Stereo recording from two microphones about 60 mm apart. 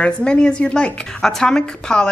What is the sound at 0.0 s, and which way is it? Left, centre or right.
A woman's voice, centre.